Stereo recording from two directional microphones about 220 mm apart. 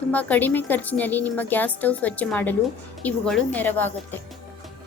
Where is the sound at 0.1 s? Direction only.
5° left (ahead or behind).